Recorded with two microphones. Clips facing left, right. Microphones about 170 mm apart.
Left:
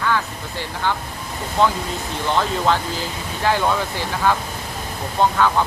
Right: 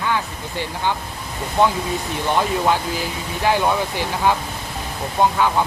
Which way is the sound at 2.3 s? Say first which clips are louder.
Right 1 dB; 15° right (ahead or behind).